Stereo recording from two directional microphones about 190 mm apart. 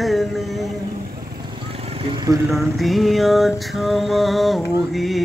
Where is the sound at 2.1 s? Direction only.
20° right (ahead or behind).